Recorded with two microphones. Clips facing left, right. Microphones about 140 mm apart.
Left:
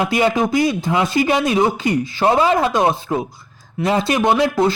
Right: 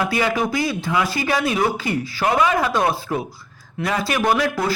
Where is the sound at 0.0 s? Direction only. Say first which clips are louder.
Left 4 dB; 25° left (ahead or behind).